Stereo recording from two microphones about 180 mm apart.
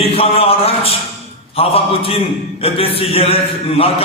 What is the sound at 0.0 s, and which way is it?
A man's voice, 30° left (ahead or behind).